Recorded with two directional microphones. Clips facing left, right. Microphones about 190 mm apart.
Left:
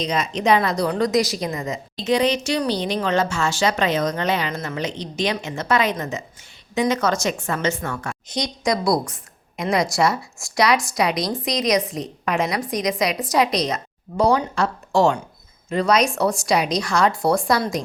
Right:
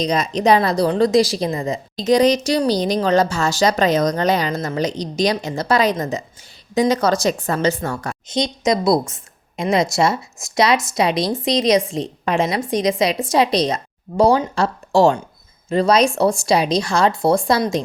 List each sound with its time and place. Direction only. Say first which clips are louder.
0.0 s a woman's voice: right 4 dB; 40° right (ahead or behind)
8.3 s a woman's voice: right 4 dB; 25° right (ahead or behind)